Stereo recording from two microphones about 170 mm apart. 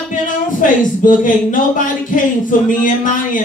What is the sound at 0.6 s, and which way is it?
Speech, 50° left (ahead or behind).